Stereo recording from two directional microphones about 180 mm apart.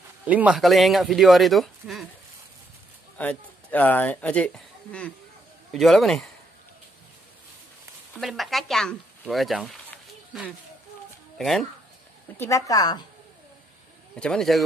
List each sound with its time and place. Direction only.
0.2 s speech: 10° right (ahead or behind)
3.2 s speech: 10° left (ahead or behind)
8.1 s speech: centre (ahead or behind)
11.3 s speech: centre (ahead or behind)
12.4 s speech: 15° left (ahead or behind)
14.1 s speech: 5° left (ahead or behind)